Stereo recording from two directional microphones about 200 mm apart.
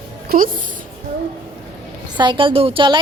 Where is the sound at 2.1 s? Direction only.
25° right (ahead or behind).